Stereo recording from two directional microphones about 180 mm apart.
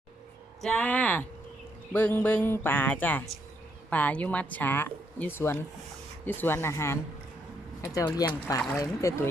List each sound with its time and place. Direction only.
0.6 s speech: 5° left (ahead or behind)